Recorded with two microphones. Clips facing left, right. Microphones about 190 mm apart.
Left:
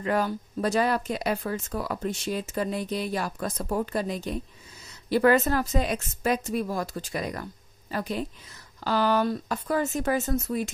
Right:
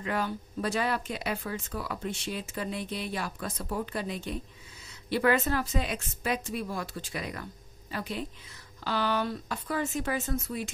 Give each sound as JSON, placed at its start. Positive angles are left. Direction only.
{"t": 0.0, "sound": "a woman's voice", "side_deg": 45}